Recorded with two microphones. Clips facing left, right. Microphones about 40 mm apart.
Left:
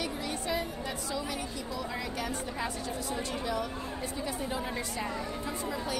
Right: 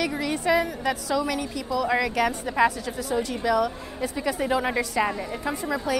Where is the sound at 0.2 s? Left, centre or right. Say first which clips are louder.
Right 10 dB; right.